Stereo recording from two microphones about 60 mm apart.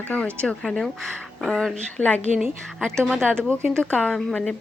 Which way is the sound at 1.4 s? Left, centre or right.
Centre.